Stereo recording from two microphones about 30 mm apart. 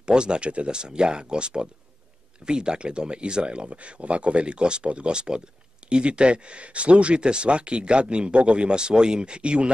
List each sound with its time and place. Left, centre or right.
0.0 s speech: right
0.7 s speech: right